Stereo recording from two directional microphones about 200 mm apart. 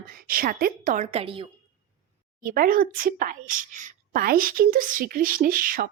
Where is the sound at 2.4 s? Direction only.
45° right (ahead or behind).